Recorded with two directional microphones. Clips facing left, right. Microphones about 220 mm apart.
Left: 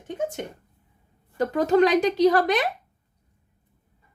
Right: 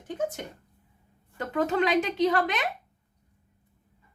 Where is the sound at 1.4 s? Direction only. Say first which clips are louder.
Left 7 dB; 35° left (ahead or behind).